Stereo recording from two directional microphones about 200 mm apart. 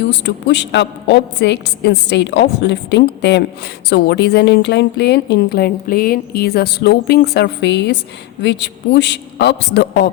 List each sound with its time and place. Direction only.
0.0 s a woman's voice: 60° left (ahead or behind)